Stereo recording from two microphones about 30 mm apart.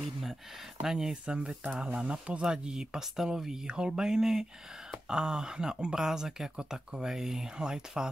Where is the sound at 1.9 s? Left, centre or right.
Right.